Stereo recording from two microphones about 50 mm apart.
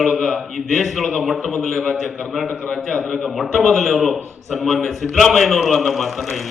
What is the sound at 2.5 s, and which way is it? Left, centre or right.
Speech, left.